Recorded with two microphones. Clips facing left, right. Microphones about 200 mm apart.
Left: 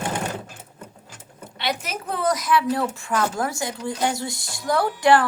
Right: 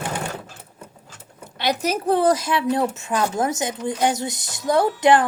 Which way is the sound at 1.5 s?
40° right (ahead or behind).